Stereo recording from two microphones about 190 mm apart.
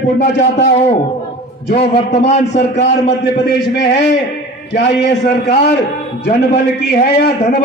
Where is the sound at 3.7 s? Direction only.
65° left (ahead or behind).